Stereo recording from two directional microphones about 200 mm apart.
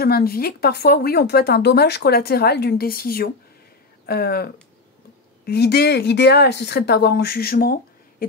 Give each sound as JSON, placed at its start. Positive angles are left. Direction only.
{"t": 0.0, "sound": "speech", "side_deg": 50}